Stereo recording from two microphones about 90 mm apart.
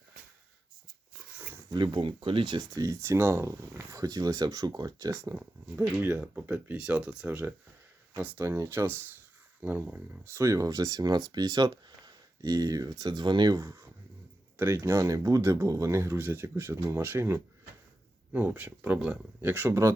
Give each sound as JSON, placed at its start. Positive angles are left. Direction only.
{"t": 1.7, "sound": "speech", "side_deg": -55}
{"t": 2.7, "sound": "speech", "side_deg": -35}
{"t": 6.0, "sound": "speech", "side_deg": -20}
{"t": 8.4, "sound": "speech", "side_deg": -30}
{"t": 10.4, "sound": "speech", "side_deg": -35}
{"t": 13.6, "sound": "speech", "side_deg": -35}
{"t": 19.4, "sound": "speech", "side_deg": -25}